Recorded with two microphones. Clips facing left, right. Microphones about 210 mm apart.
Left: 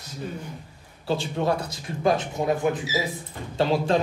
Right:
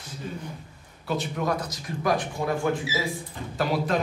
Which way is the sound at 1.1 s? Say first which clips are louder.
Left 3 dB; 30° left (ahead or behind).